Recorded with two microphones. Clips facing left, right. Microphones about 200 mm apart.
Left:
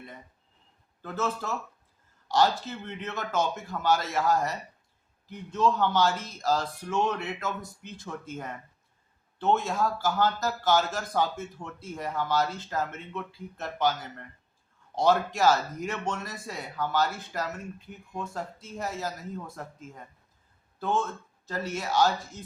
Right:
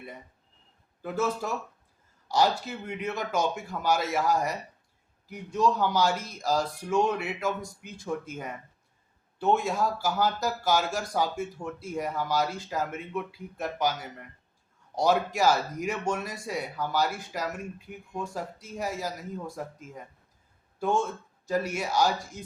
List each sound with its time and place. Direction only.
1.0 s speech: 10° right (ahead or behind)
21.4 s speech: 10° right (ahead or behind)